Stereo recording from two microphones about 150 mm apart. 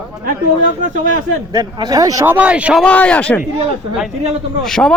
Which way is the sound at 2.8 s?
10° left (ahead or behind).